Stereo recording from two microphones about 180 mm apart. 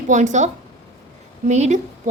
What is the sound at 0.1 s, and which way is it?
A woman's voice, 45° right (ahead or behind).